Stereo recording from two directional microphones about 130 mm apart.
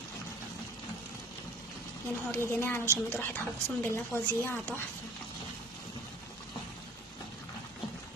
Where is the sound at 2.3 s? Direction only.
20° left (ahead or behind).